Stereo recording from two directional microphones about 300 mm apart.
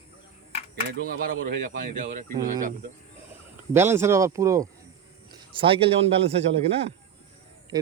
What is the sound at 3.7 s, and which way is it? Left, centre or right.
A man's voice, centre.